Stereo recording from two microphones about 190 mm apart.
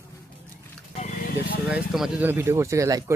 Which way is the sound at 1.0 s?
40° left (ahead or behind).